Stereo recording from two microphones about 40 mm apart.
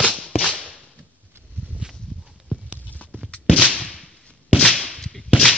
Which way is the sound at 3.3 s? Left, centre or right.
Left.